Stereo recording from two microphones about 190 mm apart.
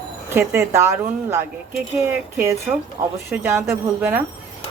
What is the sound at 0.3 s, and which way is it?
Speech, 15° right (ahead or behind).